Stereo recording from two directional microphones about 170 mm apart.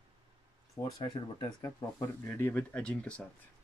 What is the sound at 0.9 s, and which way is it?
Speech, 20° left (ahead or behind).